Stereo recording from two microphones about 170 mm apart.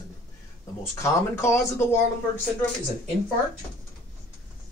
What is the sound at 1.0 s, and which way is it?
Speech, 15° left (ahead or behind).